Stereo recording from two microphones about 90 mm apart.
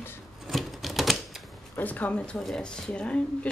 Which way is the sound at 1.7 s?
20° left (ahead or behind).